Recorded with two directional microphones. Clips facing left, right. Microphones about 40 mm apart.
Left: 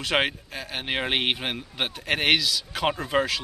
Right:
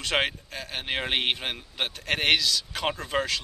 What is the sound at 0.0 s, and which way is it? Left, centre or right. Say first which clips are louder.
Speech: left 2 dB; centre.